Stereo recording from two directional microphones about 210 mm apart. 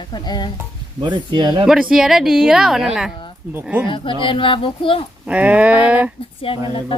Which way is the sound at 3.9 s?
25° left (ahead or behind).